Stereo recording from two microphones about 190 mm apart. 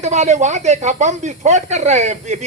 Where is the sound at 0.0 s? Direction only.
40° right (ahead or behind).